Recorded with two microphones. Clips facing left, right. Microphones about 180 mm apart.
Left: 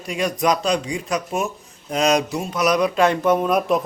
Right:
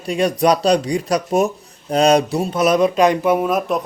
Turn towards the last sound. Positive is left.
turn(degrees=0)  # may be behind; listen again after turning